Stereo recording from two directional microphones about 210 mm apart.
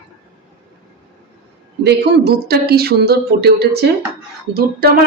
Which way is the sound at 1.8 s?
50° right (ahead or behind).